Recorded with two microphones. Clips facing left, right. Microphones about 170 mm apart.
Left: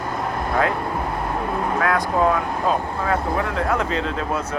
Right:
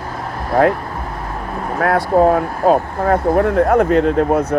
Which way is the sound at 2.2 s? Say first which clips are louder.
Right 6 dB; 50° right (ahead or behind).